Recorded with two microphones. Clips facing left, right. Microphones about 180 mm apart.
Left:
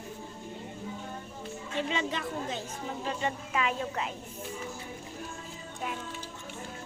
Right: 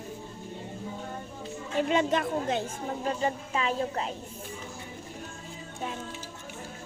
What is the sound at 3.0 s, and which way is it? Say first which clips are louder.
A woman's voice: right 4 dB; 35° right (ahead or behind).